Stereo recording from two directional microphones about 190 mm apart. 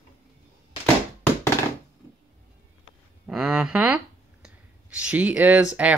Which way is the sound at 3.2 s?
5° right (ahead or behind).